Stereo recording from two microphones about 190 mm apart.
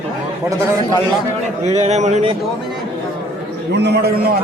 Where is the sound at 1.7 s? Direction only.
35° right (ahead or behind).